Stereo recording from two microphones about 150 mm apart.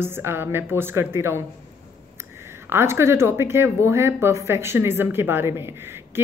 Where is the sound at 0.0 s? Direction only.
15° right (ahead or behind).